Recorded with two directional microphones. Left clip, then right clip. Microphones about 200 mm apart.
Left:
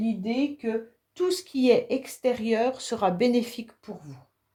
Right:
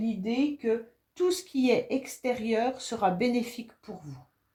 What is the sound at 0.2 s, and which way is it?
A woman's voice, 45° left (ahead or behind).